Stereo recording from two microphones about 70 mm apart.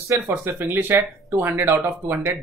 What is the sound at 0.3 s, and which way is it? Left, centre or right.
Speech, right.